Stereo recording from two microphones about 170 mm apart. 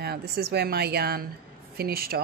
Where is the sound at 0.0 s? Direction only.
70° right (ahead or behind).